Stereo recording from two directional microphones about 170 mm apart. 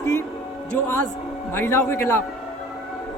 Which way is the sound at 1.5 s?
15° left (ahead or behind).